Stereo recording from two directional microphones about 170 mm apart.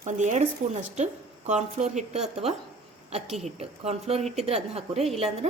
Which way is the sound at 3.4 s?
40° right (ahead or behind).